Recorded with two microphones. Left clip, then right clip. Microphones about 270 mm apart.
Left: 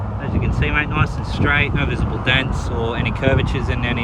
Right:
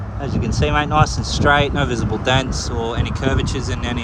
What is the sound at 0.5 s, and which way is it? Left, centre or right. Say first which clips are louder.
Speech: right 4 dB; centre.